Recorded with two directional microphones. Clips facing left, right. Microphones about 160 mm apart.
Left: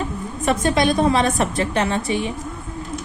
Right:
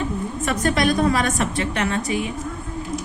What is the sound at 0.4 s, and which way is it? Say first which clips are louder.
A woman's voice: left 3 dB; 25° left (ahead or behind).